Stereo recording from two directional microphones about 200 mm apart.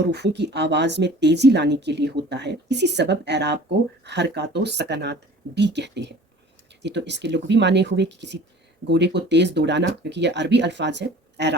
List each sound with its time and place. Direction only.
0.1 s speech: 55° right (ahead or behind)